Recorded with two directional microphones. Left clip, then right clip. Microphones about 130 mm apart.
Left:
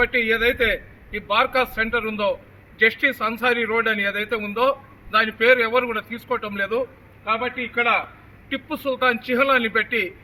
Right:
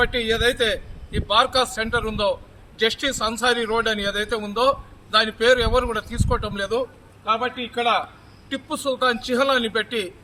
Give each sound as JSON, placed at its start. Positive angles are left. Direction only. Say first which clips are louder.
{"t": 0.0, "sound": "a man's voice", "louder": "left 1 dB", "side_deg": -35}
{"t": 4.4, "sound": "a man's voice", "louder": "right 1 dB", "side_deg": -40}